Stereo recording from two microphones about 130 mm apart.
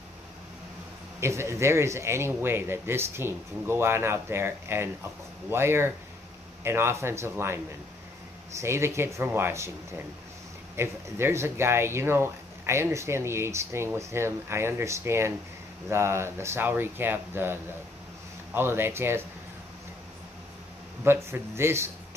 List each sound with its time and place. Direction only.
1.2 s speech: 20° right (ahead or behind)
21.0 s speech: 20° right (ahead or behind)